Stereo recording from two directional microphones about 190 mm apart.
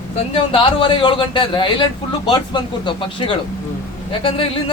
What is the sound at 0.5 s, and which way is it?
A man's voice, 30° left (ahead or behind).